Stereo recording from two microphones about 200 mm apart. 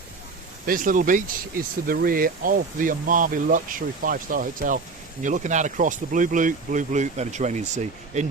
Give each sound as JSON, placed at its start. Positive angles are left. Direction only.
{"t": 0.6, "sound": "speech", "side_deg": -45}